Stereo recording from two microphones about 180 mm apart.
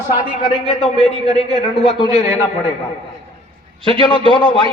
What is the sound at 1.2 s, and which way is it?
Speech, 25° right (ahead or behind).